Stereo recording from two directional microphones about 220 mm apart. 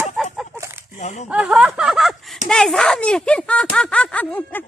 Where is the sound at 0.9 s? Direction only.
35° left (ahead or behind).